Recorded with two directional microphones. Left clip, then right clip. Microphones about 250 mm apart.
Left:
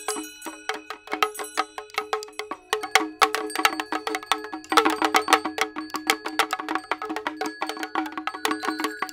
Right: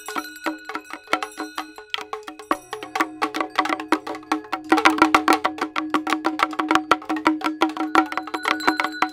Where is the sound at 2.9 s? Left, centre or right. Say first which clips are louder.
Left 3 dB; left.